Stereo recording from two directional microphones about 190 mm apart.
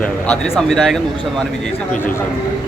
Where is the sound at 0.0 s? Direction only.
5° left (ahead or behind).